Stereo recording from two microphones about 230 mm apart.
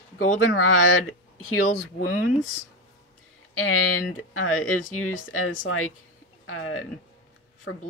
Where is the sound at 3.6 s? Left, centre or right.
Left.